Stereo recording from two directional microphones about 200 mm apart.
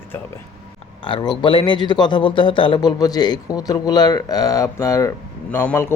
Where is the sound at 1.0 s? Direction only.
25° left (ahead or behind).